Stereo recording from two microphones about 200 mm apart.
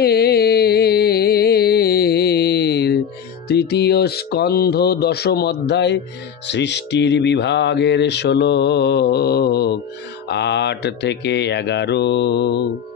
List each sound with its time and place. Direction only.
0.0 s music: 50° left (ahead or behind)